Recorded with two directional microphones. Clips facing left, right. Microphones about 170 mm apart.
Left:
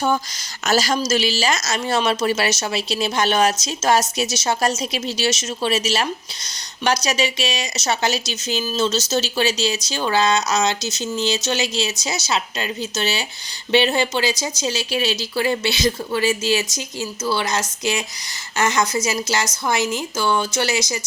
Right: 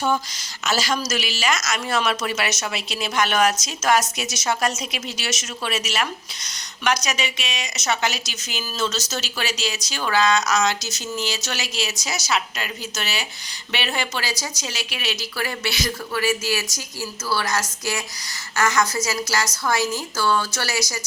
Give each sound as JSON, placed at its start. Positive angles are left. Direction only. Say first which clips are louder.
{"t": 0.6, "sound": "a woman's voice", "louder": "left 4 dB", "side_deg": 40}
{"t": 0.9, "sound": "a woman's voice", "louder": "left 6 dB", "side_deg": 30}